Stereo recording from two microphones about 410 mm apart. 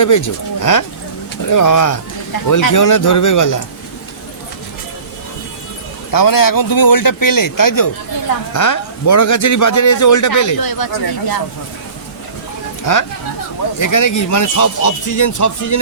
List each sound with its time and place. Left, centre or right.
0.0 s a man's voice: left
6.1 s a man's voice: left
12.8 s a man's voice: left